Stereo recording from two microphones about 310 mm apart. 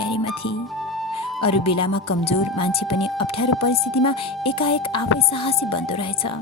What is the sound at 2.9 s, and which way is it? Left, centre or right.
Speech, left.